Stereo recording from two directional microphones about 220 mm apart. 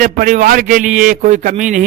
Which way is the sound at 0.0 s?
40° right (ahead or behind).